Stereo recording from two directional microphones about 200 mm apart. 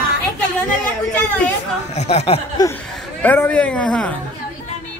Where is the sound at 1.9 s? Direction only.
30° left (ahead or behind).